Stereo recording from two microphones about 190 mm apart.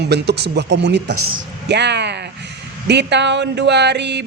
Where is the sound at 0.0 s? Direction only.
60° right (ahead or behind).